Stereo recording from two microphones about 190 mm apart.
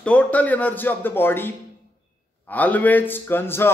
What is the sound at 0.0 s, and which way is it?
A man's voice, 5° left (ahead or behind).